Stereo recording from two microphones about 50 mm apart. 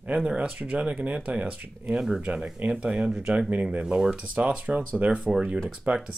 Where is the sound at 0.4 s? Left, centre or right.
Right.